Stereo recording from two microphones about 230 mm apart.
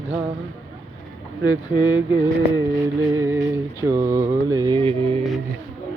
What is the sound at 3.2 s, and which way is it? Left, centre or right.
Mantra, centre.